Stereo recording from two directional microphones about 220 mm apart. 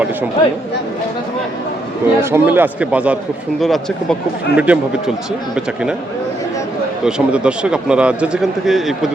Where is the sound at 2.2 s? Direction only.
10° right (ahead or behind).